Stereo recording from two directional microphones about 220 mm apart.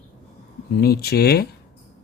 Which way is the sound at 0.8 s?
45° left (ahead or behind).